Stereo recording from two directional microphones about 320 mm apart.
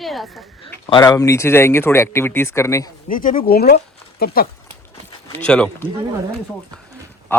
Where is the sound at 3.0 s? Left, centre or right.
Left.